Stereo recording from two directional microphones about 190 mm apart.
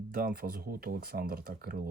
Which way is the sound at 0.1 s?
50° right (ahead or behind).